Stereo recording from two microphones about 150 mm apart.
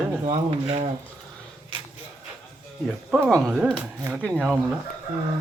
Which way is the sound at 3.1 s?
5° right (ahead or behind).